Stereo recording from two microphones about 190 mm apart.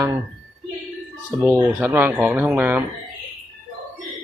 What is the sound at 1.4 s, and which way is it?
Speech, 10° right (ahead or behind).